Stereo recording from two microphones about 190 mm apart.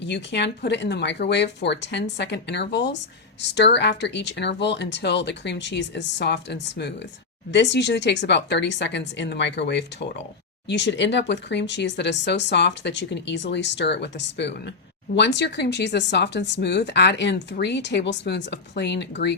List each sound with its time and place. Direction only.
0.0 s speech: 65° left (ahead or behind)